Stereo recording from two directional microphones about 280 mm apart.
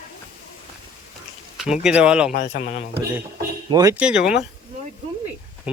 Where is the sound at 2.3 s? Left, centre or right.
Left.